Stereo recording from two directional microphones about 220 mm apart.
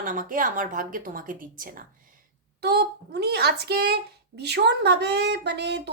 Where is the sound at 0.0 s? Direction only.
40° right (ahead or behind).